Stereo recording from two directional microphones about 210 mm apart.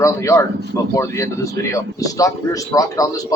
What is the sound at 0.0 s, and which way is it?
Speech, 15° left (ahead or behind).